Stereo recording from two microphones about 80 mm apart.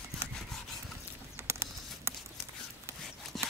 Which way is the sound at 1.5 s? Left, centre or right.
Right.